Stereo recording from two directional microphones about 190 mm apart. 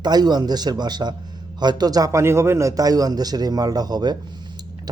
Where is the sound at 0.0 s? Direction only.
20° right (ahead or behind).